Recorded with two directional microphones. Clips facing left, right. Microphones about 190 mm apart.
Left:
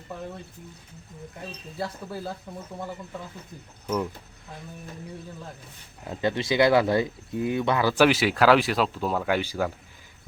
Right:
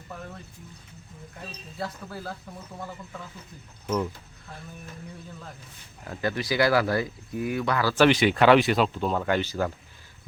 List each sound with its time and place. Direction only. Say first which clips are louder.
1.8 s speech: left 2 dB; 20° left (ahead or behind)
6.1 s speech: left 2 dB; 25° left (ahead or behind)
8.0 s speech: right 2 dB; 5° left (ahead or behind)